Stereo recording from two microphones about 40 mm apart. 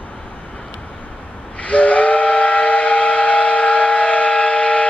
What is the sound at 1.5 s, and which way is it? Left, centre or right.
Train, left.